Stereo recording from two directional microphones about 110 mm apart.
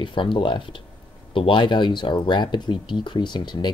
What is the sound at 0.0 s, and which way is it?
Speech, 45° left (ahead or behind).